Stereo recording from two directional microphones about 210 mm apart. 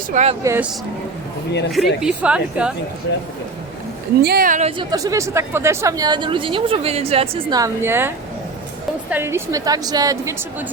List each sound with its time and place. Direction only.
0.1 s speech: 35° right (ahead or behind)
0.4 s a woman's voice: 10° right (ahead or behind)
1.7 s a woman's voice: centre (ahead or behind)
3.1 s speech: 60° left (ahead or behind)
4.2 s speech: 45° right (ahead or behind)
4.8 s a woman's voice: 15° right (ahead or behind)